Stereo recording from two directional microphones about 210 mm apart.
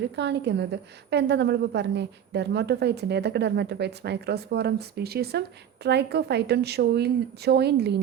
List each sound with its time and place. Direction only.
0.0 s a woman's voice: 55° right (ahead or behind)